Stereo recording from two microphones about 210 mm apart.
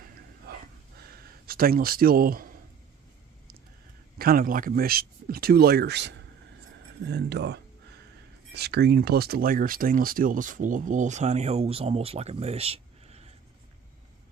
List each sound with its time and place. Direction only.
0.5 s dog: 50° right (ahead or behind)
1.1 s a sound: 45° right (ahead or behind)
4.2 s speech: 45° right (ahead or behind); by 13.2 s 30° right (ahead or behind)